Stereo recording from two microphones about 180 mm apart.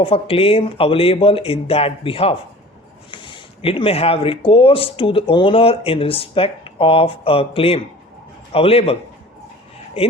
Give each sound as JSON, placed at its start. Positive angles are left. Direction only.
{"t": 0.0, "sound": "speech", "side_deg": 30}
{"t": 10.0, "sound": "speech", "side_deg": 30}